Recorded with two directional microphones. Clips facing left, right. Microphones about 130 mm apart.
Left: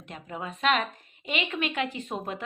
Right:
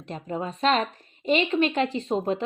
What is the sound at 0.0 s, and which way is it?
A woman's voice, 35° right (ahead or behind).